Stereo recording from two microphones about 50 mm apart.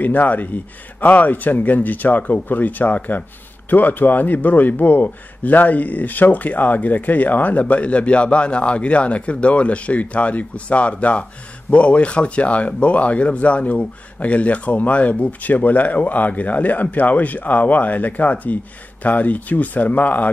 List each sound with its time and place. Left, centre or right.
0.0 s a man's voice: left